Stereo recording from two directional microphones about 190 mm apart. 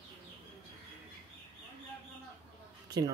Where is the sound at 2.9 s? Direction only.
20° right (ahead or behind).